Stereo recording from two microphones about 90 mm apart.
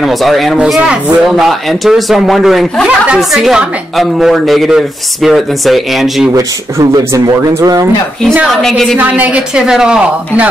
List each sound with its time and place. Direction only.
0.0 s a woman's voice: centre (ahead or behind)
0.6 s a woman's voice: 10° right (ahead or behind)
6.3 s speech: 45° right (ahead or behind)
8.5 s a woman's voice: 5° left (ahead or behind)
8.9 s speech: 20° right (ahead or behind)